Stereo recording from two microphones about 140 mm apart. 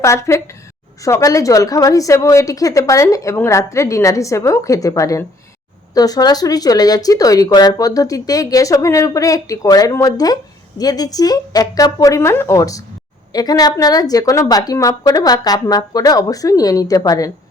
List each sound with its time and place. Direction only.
0.0 s speech: 20° left (ahead or behind)